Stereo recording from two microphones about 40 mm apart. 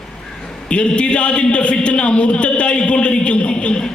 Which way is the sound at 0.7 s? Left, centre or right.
Left.